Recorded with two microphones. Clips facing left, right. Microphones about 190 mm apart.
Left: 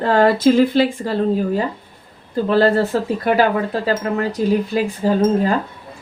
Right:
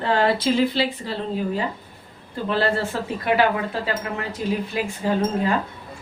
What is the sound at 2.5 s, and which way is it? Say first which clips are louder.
Speech: left 7 dB; 40° left (ahead or behind).